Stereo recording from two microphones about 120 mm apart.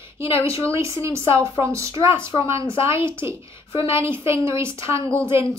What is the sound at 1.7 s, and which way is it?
Speech, 25° right (ahead or behind).